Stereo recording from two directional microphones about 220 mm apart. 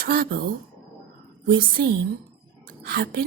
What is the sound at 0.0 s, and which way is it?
A woman's voice, 40° right (ahead or behind).